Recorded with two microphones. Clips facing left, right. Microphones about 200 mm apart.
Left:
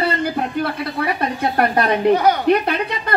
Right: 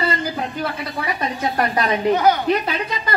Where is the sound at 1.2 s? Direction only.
60° left (ahead or behind).